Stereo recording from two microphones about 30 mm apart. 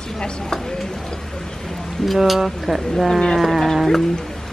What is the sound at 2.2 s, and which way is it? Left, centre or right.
Speech, centre.